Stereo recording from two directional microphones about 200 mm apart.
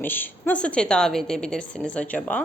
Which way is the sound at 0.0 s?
10° left (ahead or behind).